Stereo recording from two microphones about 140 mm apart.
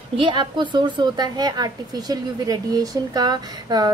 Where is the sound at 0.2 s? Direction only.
35° right (ahead or behind).